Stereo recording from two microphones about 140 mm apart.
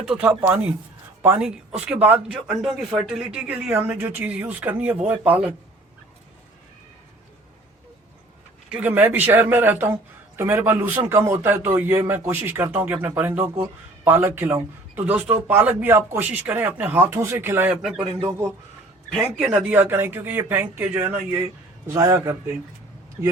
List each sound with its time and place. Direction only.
0.1 s a man's voice: 10° right (ahead or behind)
8.7 s a man's voice: 10° right (ahead or behind)
18.0 s speech: 30° right (ahead or behind)
19.4 s a man's voice: 5° right (ahead or behind)